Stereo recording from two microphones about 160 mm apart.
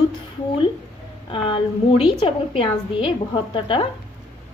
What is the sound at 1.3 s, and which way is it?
A woman's voice, 35° left (ahead or behind).